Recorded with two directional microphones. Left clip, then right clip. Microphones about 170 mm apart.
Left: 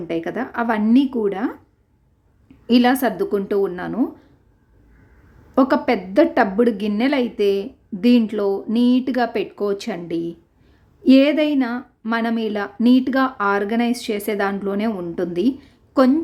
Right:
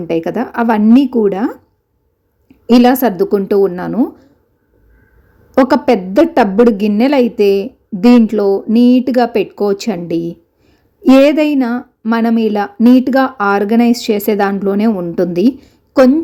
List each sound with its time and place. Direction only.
0.1 s a woman's voice: 25° right (ahead or behind)
2.6 s a woman's voice: 25° right (ahead or behind)
5.5 s a woman's voice: 20° right (ahead or behind)